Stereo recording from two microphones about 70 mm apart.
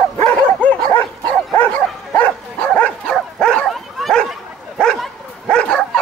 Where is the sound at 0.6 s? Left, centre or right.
Left.